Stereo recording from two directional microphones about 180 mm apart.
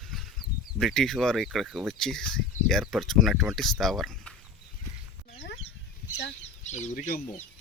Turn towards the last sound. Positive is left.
turn(degrees=45)  # may be behind; listen again after turning